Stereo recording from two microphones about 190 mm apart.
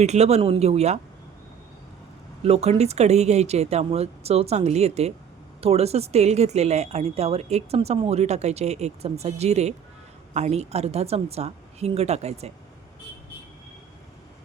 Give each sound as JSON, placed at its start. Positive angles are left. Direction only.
{"t": 0.0, "sound": "speech", "side_deg": -35}
{"t": 2.4, "sound": "speech", "side_deg": -35}